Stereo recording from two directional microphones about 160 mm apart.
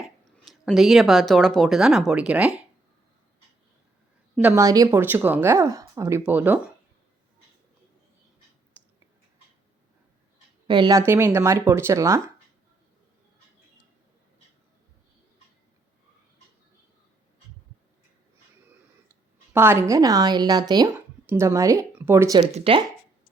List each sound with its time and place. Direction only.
0.3 s speech: centre (ahead or behind)
4.4 s a woman's voice: 15° right (ahead or behind)
10.7 s a woman's voice: 25° right (ahead or behind)
19.5 s speech: 15° right (ahead or behind)
22.5 s speech: 35° right (ahead or behind)